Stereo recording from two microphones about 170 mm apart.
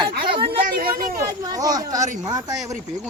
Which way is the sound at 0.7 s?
60° right (ahead or behind).